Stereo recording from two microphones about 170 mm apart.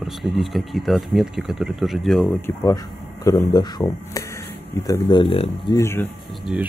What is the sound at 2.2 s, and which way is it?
Speech, 15° left (ahead or behind).